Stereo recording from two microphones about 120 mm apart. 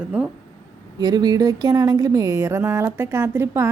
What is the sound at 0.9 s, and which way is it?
A woman's voice, 35° right (ahead or behind).